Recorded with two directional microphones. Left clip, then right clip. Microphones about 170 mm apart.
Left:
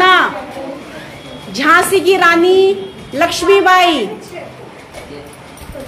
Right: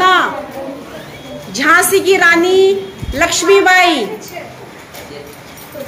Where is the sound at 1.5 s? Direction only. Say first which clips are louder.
Even; 15° left (ahead or behind).